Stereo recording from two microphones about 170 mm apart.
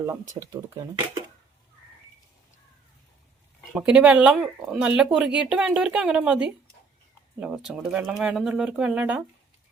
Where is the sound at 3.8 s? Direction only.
5° right (ahead or behind).